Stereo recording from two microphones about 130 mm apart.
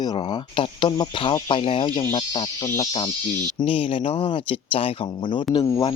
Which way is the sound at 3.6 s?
45° left (ahead or behind).